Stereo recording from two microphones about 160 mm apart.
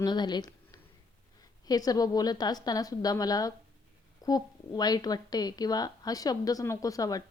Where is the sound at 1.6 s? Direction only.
25° left (ahead or behind).